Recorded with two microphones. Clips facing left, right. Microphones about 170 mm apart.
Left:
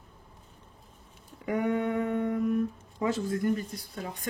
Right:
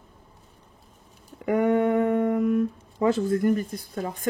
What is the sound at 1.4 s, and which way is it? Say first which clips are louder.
Speech: right 7 dB; 60° right (ahead or behind).